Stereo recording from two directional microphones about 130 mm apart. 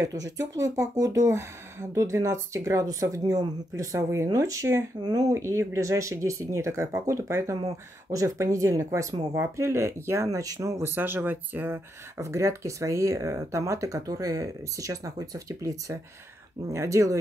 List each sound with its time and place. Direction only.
0.0 s speech: 25° right (ahead or behind)